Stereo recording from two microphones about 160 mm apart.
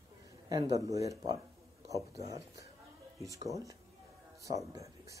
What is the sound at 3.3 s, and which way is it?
Speech, 20° right (ahead or behind).